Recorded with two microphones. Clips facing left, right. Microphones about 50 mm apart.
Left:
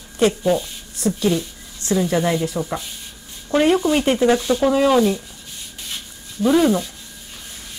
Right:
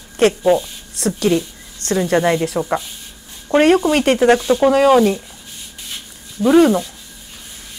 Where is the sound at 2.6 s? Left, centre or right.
Right.